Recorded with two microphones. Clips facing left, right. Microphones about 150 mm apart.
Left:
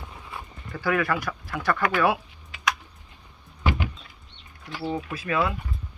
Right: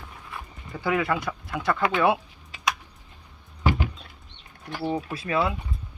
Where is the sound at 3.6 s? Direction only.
40° right (ahead or behind).